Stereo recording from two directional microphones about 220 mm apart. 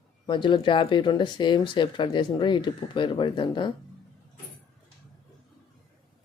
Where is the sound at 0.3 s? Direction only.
20° left (ahead or behind).